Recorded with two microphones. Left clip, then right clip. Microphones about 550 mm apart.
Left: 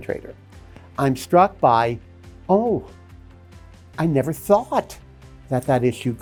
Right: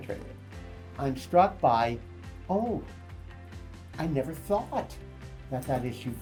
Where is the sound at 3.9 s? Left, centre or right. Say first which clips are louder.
Left 10 dB; left.